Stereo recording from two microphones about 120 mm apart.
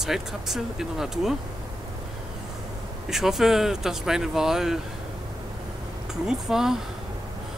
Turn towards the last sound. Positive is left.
turn(degrees=-5)  # may be behind; listen again after turning